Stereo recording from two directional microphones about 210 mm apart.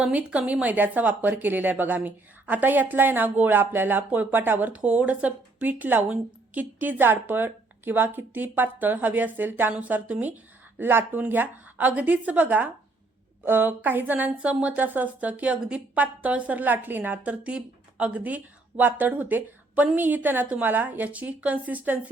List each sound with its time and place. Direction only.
0.0 s speech: 5° right (ahead or behind)